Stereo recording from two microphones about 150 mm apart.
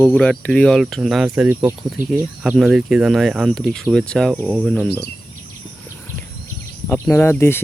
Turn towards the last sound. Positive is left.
turn(degrees=15)  # may be behind; listen again after turning